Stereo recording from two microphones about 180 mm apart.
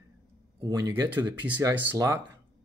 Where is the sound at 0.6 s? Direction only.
20° right (ahead or behind).